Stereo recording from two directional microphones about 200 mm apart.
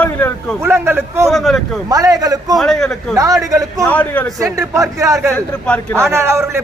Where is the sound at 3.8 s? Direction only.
5° left (ahead or behind).